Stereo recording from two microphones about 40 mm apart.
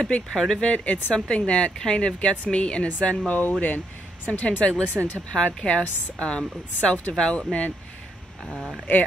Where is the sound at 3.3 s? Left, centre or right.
Left.